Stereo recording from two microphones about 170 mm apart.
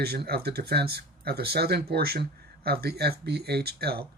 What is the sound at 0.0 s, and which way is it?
Speech, 70° right (ahead or behind).